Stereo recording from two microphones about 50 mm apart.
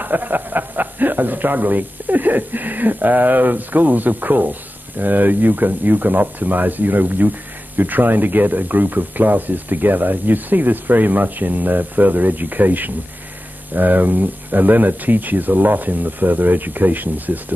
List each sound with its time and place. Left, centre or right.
0.0 s speech: right